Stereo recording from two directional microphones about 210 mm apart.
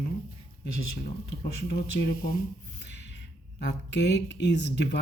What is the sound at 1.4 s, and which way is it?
Speech, 50° left (ahead or behind).